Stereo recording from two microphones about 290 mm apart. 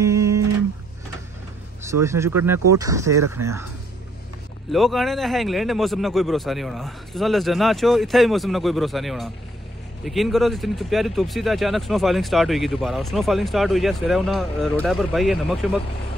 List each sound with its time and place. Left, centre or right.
0.0 s music: centre
2.0 s speech: centre
4.6 s speech: centre